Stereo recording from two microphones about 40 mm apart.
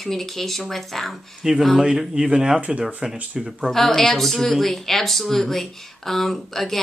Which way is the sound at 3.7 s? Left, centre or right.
Centre.